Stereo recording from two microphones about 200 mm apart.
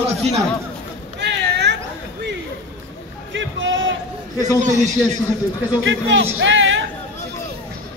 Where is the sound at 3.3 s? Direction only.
70° right (ahead or behind).